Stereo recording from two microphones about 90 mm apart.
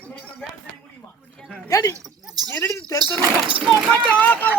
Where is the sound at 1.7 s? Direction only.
35° left (ahead or behind).